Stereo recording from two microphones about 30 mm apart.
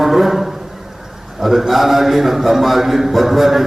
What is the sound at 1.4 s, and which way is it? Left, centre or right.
A man's voice, centre.